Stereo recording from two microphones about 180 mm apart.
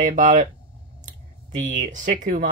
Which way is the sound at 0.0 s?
45° right (ahead or behind).